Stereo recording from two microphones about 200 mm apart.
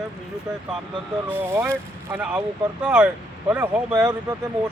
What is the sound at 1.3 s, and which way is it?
Speech, 10° right (ahead or behind).